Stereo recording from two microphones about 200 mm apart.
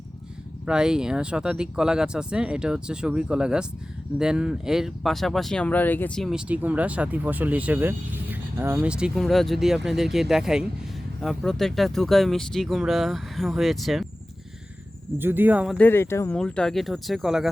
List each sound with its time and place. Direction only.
0.6 s speech: 5° right (ahead or behind)
15.2 s speech: 10° right (ahead or behind)
15.8 s speech: 10° left (ahead or behind)
16.4 s speech: 5° left (ahead or behind)